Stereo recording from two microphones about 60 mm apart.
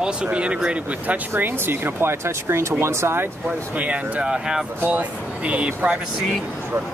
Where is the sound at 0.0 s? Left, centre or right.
Centre.